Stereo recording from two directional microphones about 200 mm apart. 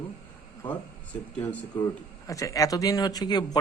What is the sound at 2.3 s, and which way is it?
A man's voice, 15° left (ahead or behind).